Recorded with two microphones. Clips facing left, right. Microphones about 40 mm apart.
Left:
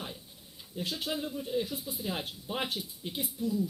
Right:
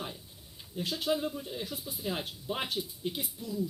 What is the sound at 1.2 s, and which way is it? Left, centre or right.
Speech, centre.